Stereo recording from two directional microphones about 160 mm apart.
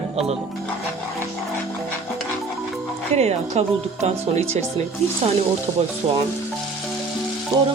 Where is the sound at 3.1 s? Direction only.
45° right (ahead or behind).